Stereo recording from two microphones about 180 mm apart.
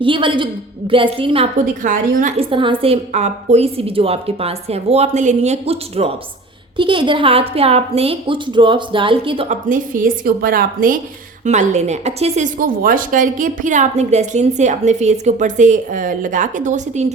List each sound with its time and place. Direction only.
0.0 s a woman's voice: 30° right (ahead or behind)
1.5 s a woman's voice: 45° right (ahead or behind)
2.4 s a woman's voice: 30° right (ahead or behind)
9.5 s a woman's voice: 45° right (ahead or behind)